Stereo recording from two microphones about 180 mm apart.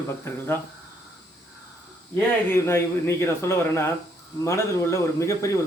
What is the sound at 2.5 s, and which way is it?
Speech, 15° left (ahead or behind).